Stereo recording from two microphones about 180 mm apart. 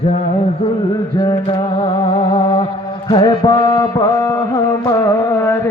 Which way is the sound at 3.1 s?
25° left (ahead or behind).